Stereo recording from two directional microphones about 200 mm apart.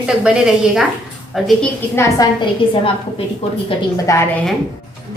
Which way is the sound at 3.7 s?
15° left (ahead or behind).